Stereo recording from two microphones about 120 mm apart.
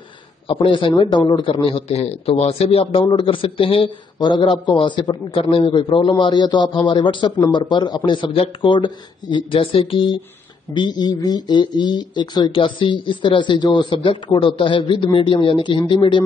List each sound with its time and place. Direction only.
0.5 s a man's voice: 45° left (ahead or behind)